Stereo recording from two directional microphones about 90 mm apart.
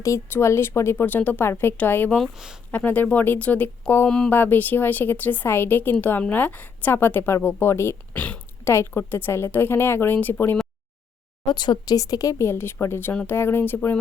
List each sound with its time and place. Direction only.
0.0 s a woman's voice: 35° left (ahead or behind)
2.1 s speech: 5° right (ahead or behind)
2.7 s a woman's voice: 20° left (ahead or behind)
8.1 s a sound: 15° left (ahead or behind)
8.7 s a woman's voice: 30° left (ahead or behind)
11.4 s a woman's voice: 55° left (ahead or behind); by 14.0 s 20° left (ahead or behind)